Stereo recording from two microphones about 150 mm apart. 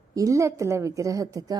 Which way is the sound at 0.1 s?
20° right (ahead or behind).